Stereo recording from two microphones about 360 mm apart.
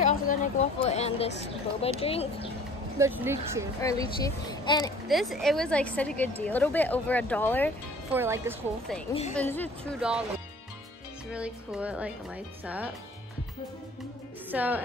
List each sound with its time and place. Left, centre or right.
0.0 s a sound: left
1.8 s a child's voice: centre
3.0 s speech: centre
4.2 s a child's voice: centre
5.0 s a woman's voice: centre
8.1 s a woman's voice: centre
11.3 s a woman's voice: centre
14.5 s speech: centre